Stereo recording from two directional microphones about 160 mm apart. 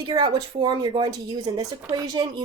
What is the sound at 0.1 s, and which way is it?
Speech, 30° right (ahead or behind).